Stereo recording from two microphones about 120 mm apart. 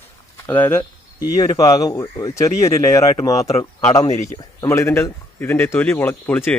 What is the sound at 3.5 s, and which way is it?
Speech, 65° left (ahead or behind).